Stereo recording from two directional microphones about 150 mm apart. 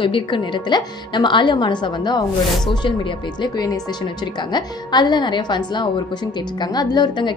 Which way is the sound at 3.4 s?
25° left (ahead or behind).